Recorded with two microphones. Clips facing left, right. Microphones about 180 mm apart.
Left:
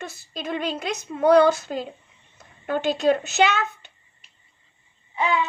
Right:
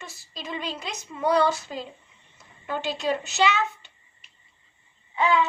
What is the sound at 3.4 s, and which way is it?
Speech, 55° left (ahead or behind).